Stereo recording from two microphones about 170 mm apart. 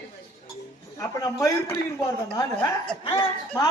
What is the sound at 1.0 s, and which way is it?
Speech, 20° left (ahead or behind).